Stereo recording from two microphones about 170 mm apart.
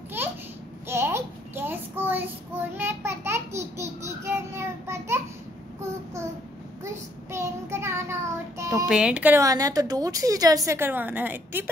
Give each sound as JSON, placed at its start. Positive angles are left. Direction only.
{"t": 0.8, "sound": "child singing", "side_deg": -15}
{"t": 2.8, "sound": "babbling", "side_deg": -15}
{"t": 6.8, "sound": "child singing", "side_deg": -15}
{"t": 8.8, "sound": "a woman's voice", "side_deg": -5}